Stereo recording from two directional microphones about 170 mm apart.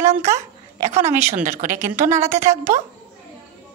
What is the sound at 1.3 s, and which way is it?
Speech, 50° right (ahead or behind).